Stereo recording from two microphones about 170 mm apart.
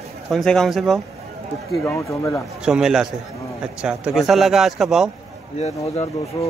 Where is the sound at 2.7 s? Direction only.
5° right (ahead or behind).